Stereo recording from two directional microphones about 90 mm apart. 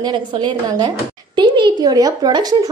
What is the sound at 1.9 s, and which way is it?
Speech, 45° right (ahead or behind).